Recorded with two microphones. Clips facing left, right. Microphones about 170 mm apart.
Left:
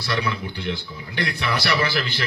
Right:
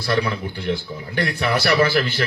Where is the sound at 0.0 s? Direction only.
40° right (ahead or behind).